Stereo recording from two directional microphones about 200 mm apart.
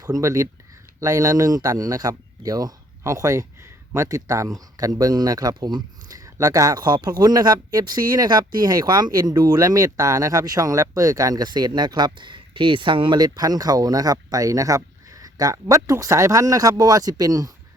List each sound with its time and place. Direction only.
0.0 s speech: 15° right (ahead or behind)